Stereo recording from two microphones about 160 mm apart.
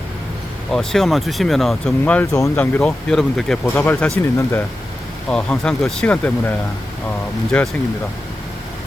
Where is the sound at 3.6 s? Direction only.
15° left (ahead or behind).